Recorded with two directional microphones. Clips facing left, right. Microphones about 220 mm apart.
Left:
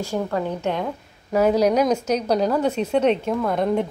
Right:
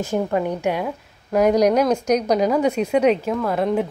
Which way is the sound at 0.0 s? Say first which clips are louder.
Right 3 dB; 20° right (ahead or behind).